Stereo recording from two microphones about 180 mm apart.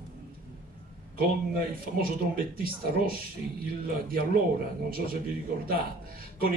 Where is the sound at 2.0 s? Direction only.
55° right (ahead or behind).